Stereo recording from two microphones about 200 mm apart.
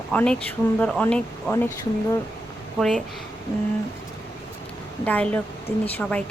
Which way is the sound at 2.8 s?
Centre (ahead or behind).